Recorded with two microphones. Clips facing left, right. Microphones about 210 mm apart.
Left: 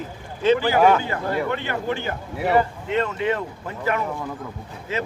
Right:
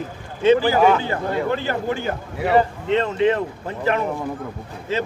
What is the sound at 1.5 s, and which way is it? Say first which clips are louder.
Speech: right 3 dB; 40° right (ahead or behind).